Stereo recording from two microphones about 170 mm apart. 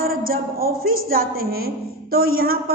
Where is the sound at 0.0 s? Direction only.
60° right (ahead or behind).